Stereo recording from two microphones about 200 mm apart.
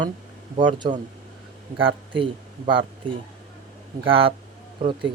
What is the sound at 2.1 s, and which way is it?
Speech, 25° right (ahead or behind).